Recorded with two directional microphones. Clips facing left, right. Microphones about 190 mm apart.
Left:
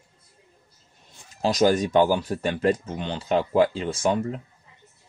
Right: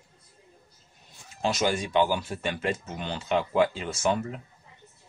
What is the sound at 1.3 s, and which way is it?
Speech, 35° left (ahead or behind).